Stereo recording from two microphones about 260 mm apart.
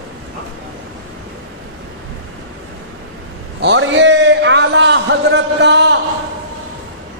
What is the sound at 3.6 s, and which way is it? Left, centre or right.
A man's voice, right.